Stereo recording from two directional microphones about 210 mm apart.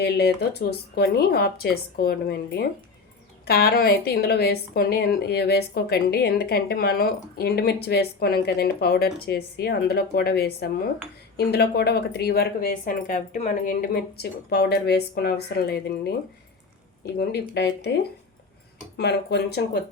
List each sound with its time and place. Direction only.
0.0 s a woman's voice: 50° left (ahead or behind)
17.5 s a woman's voice: 55° left (ahead or behind)
18.9 s a woman's voice: 55° left (ahead or behind)